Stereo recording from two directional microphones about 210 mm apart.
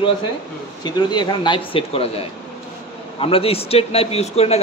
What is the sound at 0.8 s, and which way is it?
A man's voice, 20° left (ahead or behind).